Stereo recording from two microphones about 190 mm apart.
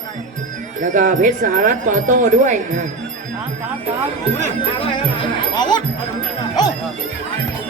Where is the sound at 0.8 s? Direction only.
45° right (ahead or behind).